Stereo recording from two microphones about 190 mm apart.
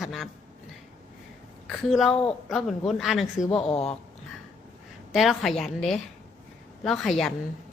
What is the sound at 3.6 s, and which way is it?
Speech, 30° left (ahead or behind).